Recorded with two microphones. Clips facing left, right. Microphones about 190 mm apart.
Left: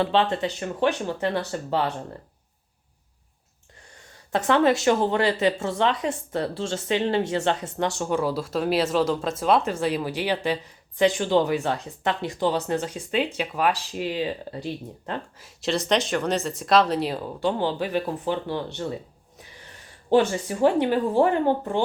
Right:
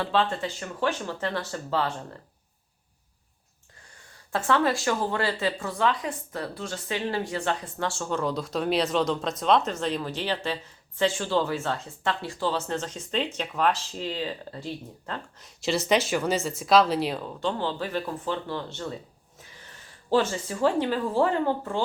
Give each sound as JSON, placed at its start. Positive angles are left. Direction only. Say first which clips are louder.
{"t": 0.0, "sound": "speech", "louder": "left 4 dB", "side_deg": 20}
{"t": 4.3, "sound": "speech", "louder": "left 4 dB", "side_deg": 20}
{"t": 15.4, "sound": "speech", "louder": "even", "side_deg": 0}
{"t": 20.1, "sound": "speech", "louder": "left 4 dB", "side_deg": 15}